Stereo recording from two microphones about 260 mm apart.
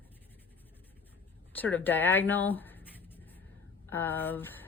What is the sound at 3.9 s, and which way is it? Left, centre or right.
Speech, centre.